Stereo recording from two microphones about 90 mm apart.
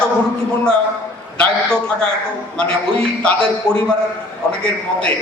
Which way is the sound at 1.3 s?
10° left (ahead or behind).